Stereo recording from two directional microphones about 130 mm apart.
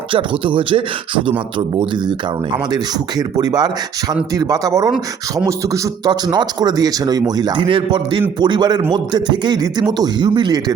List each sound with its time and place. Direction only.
0.1 s speech: 40° right (ahead or behind)